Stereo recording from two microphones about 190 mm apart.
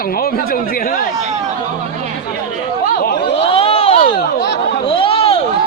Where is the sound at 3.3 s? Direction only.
30° left (ahead or behind).